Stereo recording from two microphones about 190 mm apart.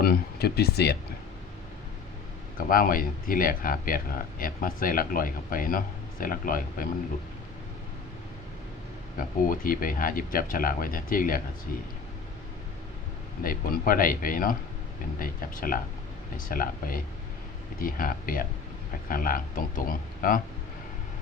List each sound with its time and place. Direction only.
0.0 s speech: 55° left (ahead or behind)
2.6 s speech: 50° left (ahead or behind)
9.5 s speech: 50° left (ahead or behind)
13.4 s speech: 50° left (ahead or behind)